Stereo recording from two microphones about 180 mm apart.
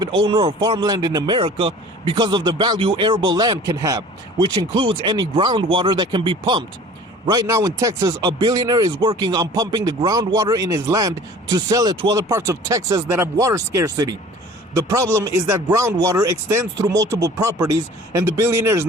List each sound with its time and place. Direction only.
0.3 s a man's voice: 25° right (ahead or behind)